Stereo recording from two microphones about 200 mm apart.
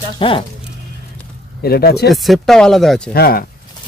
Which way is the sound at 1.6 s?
50° left (ahead or behind).